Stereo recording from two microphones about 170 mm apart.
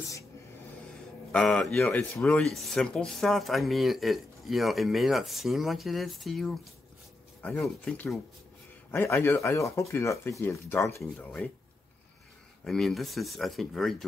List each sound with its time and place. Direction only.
1.3 s speech: 5° left (ahead or behind)
8.9 s speech: 10° left (ahead or behind)
12.6 s speech: centre (ahead or behind)